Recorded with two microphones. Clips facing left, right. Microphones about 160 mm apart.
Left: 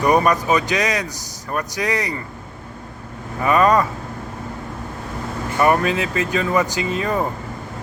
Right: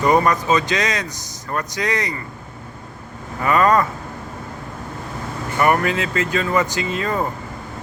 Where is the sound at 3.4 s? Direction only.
15° left (ahead or behind).